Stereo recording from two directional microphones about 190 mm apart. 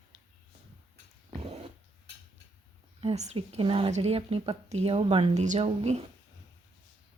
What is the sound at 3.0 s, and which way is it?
A woman's voice, 35° right (ahead or behind).